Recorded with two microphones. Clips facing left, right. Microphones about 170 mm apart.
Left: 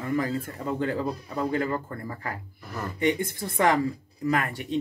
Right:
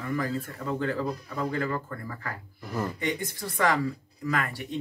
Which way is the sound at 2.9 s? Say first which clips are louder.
Left 6 dB; 20° left (ahead or behind).